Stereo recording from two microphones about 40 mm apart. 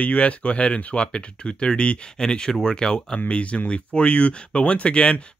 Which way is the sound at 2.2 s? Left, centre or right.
Centre.